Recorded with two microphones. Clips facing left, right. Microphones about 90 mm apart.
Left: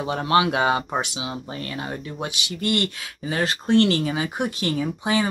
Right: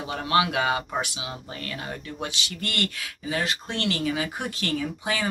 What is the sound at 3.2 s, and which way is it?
Speech, 40° left (ahead or behind).